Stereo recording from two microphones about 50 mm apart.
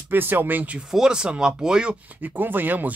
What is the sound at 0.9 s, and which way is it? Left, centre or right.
Speech, centre.